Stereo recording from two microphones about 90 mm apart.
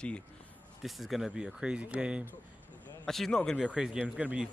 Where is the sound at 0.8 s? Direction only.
Centre (ahead or behind).